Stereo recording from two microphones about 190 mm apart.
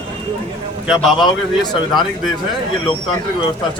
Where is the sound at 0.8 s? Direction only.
Centre (ahead or behind).